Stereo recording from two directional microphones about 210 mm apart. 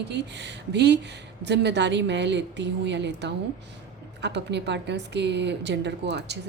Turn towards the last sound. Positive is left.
turn(degrees=-55)  # may be behind; listen again after turning